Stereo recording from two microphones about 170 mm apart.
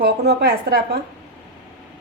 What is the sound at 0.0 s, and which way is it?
Speech, 70° right (ahead or behind).